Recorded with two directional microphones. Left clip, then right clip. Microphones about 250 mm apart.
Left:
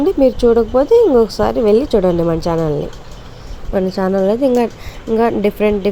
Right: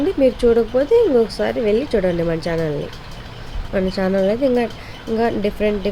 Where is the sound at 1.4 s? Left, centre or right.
Centre.